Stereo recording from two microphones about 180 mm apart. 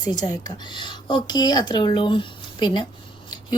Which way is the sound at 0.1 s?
20° left (ahead or behind).